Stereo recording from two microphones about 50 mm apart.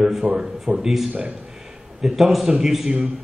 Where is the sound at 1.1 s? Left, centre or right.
Right.